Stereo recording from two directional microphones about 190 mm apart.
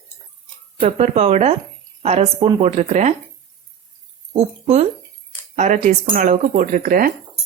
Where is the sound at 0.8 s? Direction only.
35° right (ahead or behind).